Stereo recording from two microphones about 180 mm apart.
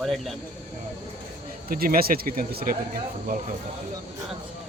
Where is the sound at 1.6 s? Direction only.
55° right (ahead or behind).